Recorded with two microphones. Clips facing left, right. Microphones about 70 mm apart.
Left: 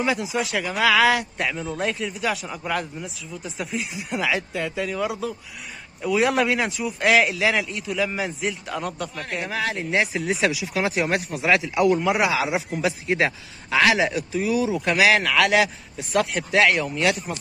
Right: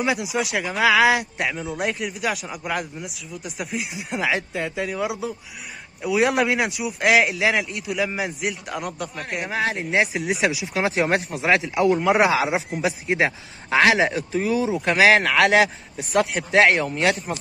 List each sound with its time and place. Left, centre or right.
0.0 s a man's voice: centre
9.5 s a man's voice: right
12.1 s a man's voice: right
12.4 s a man's voice: right